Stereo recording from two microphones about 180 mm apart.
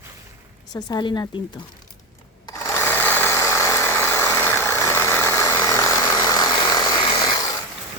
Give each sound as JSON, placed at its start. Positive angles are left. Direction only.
{"t": 0.7, "sound": "speech", "side_deg": 20}
{"t": 2.5, "sound": "sewing machine", "side_deg": 15}